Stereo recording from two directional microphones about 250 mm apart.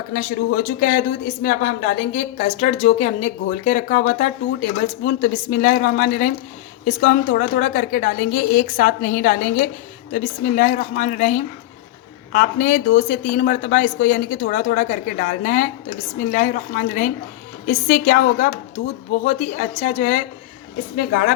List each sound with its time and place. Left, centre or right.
0.1 s a woman's voice: left